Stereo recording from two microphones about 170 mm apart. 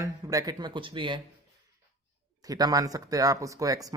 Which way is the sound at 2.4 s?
20° right (ahead or behind).